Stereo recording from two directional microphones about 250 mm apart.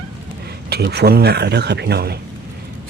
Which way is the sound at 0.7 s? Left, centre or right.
Right.